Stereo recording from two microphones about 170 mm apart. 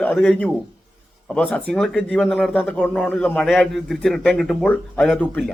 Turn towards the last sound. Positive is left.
turn(degrees=5)  # may be behind; listen again after turning